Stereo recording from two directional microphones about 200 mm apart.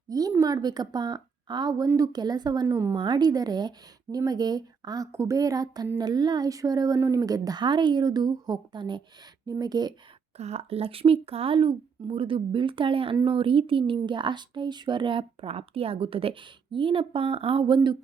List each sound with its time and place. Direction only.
0.1 s a woman's voice: 15° right (ahead or behind)
10.3 s a woman's voice: 30° right (ahead or behind)